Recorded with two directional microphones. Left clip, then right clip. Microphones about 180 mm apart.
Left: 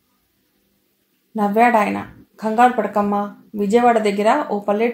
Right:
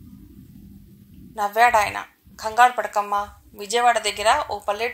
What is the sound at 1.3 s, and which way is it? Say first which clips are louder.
A woman's voice: left 2 dB; 40° right (ahead or behind).